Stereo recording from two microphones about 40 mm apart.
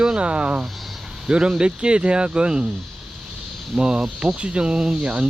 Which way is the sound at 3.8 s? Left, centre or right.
Right.